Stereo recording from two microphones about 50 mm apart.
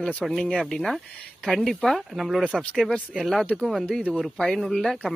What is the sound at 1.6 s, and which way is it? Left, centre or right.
Speech, centre.